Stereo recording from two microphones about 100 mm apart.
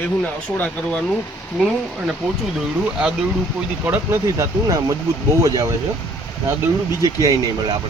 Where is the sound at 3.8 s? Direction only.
20° right (ahead or behind).